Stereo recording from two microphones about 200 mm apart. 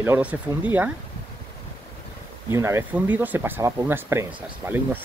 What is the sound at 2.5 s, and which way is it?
Speech, 15° right (ahead or behind).